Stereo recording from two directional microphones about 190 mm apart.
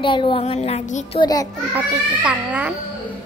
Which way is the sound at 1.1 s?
20° left (ahead or behind).